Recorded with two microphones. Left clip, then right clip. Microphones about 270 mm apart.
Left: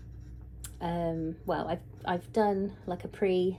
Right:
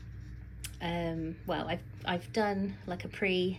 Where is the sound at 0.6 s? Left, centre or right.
Left.